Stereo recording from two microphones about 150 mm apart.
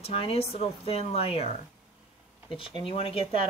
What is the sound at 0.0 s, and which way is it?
Speech, 40° left (ahead or behind).